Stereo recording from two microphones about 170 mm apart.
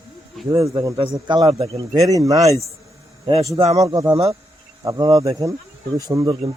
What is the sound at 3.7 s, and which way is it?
A man's voice, 20° right (ahead or behind).